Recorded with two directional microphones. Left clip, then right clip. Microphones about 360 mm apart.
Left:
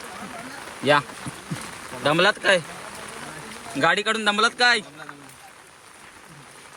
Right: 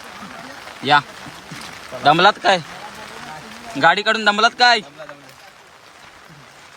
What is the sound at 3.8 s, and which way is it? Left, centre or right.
A man's voice, centre.